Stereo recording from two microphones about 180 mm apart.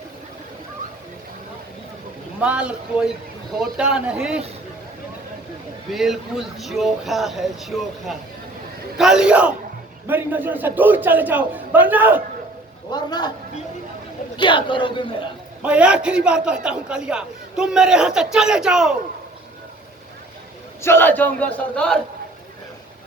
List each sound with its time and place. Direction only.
2.4 s a man's voice: 5° right (ahead or behind)
5.9 s a man's voice: centre (ahead or behind)
12.9 s a woman's voice: 25° left (ahead or behind)
14.3 s a woman's voice: 25° left (ahead or behind)
15.6 s a man's voice: 5° right (ahead or behind)
20.8 s speech: 10° left (ahead or behind)